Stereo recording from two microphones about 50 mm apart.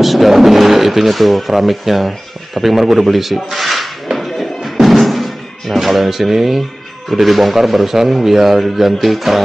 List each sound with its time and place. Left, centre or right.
0.0 s speech: centre